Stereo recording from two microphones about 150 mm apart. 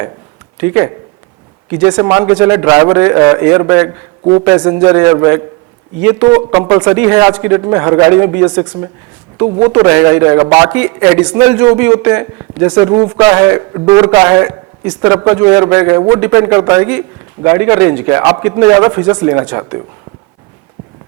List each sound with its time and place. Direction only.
0.6 s a man's voice: 15° right (ahead or behind)
6.5 s a man's voice: 25° right (ahead or behind)